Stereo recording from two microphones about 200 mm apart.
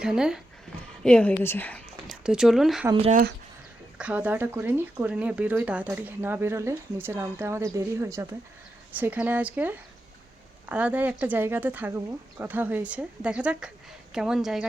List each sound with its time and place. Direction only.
0.0 s a woman's voice: 5° right (ahead or behind)
2.2 s speech: 5° right (ahead or behind)
2.9 s speech: 30° right (ahead or behind)
3.9 s speech: 5° right (ahead or behind)